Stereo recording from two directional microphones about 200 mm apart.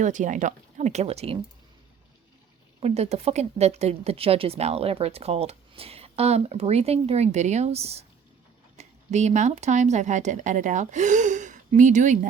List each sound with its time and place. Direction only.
0.0 s a woman's voice: 40° right (ahead or behind)
2.8 s a woman's voice: 30° right (ahead or behind)